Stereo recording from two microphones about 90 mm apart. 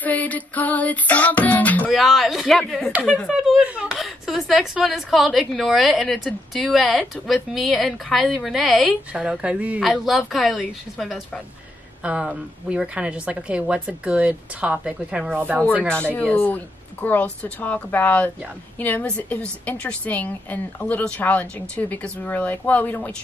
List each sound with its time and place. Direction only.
0.0 s a woman's voice: 15° left (ahead or behind)
1.9 s a woman's voice: centre (ahead or behind)
3.9 s a sound: centre (ahead or behind)
4.8 s a woman's voice: centre (ahead or behind)
9.8 s a woman's voice: centre (ahead or behind)
12.0 s a woman's voice: 15° right (ahead or behind)
16.1 s a woman's voice: 15° left (ahead or behind)